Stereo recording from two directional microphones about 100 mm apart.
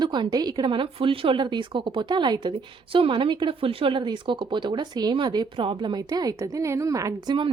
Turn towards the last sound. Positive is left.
turn(degrees=-35)  # may be behind; listen again after turning